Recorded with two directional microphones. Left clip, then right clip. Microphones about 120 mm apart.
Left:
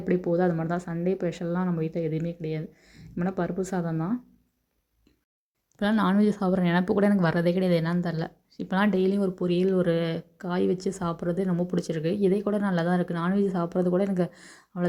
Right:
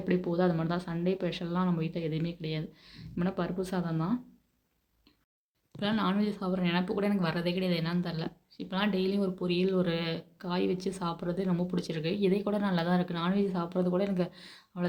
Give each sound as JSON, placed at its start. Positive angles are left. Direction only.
{"t": 0.0, "sound": "speech", "side_deg": 40}
{"t": 1.6, "sound": "speech", "side_deg": 30}
{"t": 5.8, "sound": "a woman's voice", "side_deg": 70}
{"t": 9.1, "sound": "speech", "side_deg": 60}